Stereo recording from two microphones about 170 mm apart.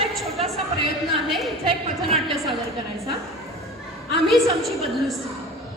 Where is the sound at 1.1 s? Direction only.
Centre (ahead or behind).